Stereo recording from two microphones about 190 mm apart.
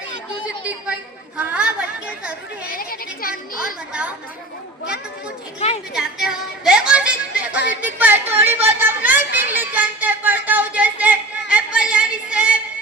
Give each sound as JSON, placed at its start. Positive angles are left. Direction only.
{"t": 1.4, "sound": "a woman's voice", "side_deg": -5}
{"t": 2.6, "sound": "speech", "side_deg": 50}
{"t": 5.5, "sound": "a woman's voice", "side_deg": 30}
{"t": 5.9, "sound": "speech", "side_deg": -5}
{"t": 7.8, "sound": "a sound", "side_deg": -10}